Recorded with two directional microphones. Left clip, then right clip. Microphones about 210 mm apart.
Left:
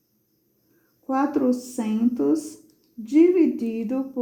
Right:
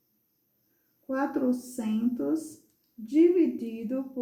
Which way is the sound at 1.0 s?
40° left (ahead or behind).